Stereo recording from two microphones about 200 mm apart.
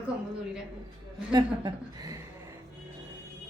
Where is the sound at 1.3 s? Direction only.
20° right (ahead or behind).